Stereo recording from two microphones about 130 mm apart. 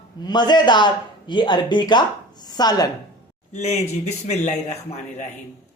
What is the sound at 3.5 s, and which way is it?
Speech, 65° left (ahead or behind).